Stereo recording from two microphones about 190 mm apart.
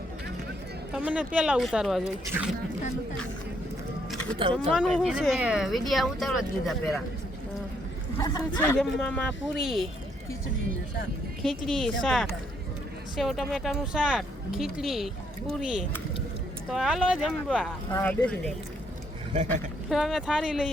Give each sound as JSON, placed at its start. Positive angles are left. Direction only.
{"t": 0.9, "sound": "speech", "side_deg": -5}
{"t": 4.5, "sound": "speech", "side_deg": 0}
{"t": 8.2, "sound": "speech", "side_deg": 15}
{"t": 8.8, "sound": "speech", "side_deg": 5}
{"t": 11.4, "sound": "speech", "side_deg": 0}
{"t": 17.9, "sound": "speech", "side_deg": 5}
{"t": 19.3, "sound": "speech", "side_deg": -35}
{"t": 19.9, "sound": "speech", "side_deg": 0}